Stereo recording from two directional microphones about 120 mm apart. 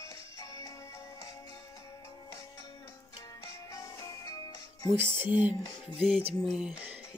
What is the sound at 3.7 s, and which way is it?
Music, 30° left (ahead or behind).